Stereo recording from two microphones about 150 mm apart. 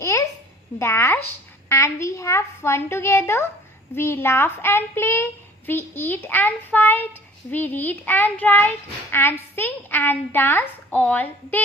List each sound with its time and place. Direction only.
0.0 s babbling: 20° left (ahead or behind)
0.8 s a child's voice: 15° left (ahead or behind)